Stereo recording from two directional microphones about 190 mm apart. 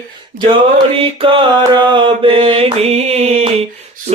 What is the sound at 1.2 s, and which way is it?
Mantra, 25° right (ahead or behind).